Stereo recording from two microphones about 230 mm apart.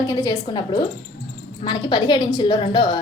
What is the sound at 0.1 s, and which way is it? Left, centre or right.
A woman's voice, centre.